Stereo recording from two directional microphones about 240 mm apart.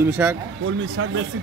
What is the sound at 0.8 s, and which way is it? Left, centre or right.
Speech, right.